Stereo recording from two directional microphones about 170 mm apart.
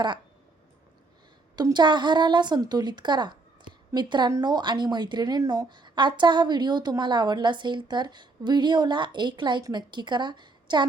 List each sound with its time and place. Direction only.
1.5 s a woman's voice: 25° right (ahead or behind)